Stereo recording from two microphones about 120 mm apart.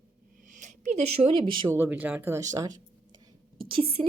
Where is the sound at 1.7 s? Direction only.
15° right (ahead or behind).